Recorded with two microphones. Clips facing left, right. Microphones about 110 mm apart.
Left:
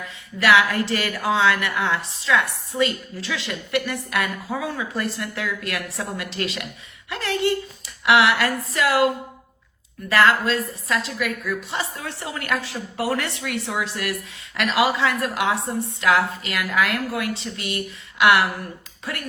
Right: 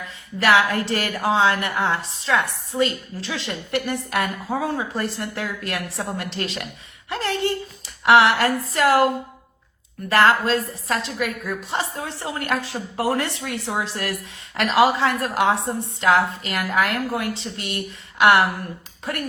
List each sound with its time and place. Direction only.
0.3 s a woman's voice: 40° right (ahead or behind)
10.1 s a woman's voice: 40° right (ahead or behind)